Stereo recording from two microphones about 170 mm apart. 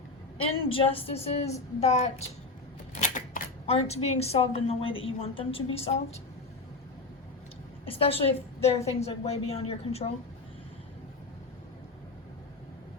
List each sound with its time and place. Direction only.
0.3 s a woman's voice: 30° left (ahead or behind)
7.9 s a woman's voice: 35° left (ahead or behind)